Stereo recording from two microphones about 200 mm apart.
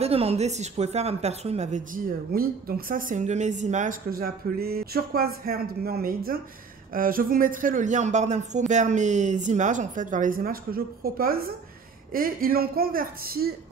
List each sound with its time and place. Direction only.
0.0 s speech: 30° right (ahead or behind); by 13.6 s 50° right (ahead or behind)